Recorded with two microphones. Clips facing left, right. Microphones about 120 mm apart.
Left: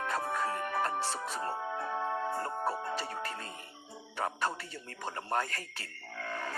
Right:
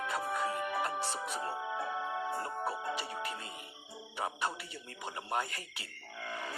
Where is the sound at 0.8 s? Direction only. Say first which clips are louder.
Left 2 dB; 15° right (ahead or behind).